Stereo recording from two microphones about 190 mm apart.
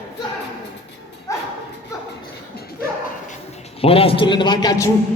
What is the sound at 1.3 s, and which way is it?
Bow-wow, 15° left (ahead or behind).